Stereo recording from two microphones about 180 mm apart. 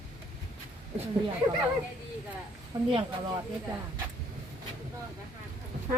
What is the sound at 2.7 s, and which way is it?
Speech, 20° right (ahead or behind).